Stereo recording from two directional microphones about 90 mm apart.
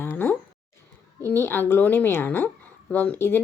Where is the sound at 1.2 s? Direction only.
25° left (ahead or behind).